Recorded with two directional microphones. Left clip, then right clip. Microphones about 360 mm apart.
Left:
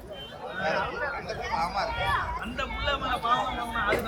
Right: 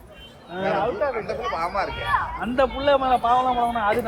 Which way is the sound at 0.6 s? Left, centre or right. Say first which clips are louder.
Right 6 dB; centre.